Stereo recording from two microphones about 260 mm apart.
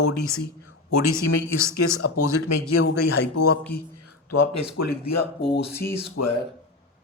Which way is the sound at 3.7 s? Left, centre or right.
Left.